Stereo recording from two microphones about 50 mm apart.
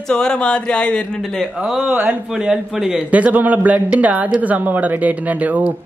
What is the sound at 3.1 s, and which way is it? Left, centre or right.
Speech, right.